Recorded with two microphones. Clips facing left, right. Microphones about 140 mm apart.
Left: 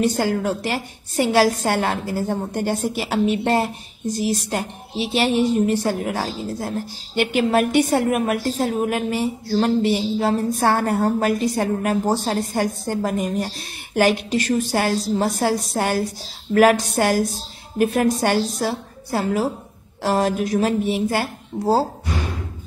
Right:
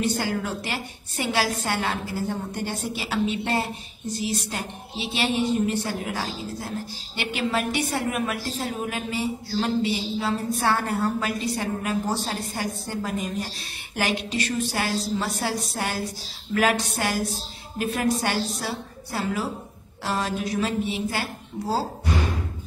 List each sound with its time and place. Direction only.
0.0 s speech: 45° left (ahead or behind)